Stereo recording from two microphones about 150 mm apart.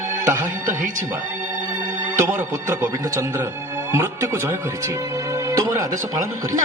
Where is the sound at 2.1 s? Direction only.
20° right (ahead or behind).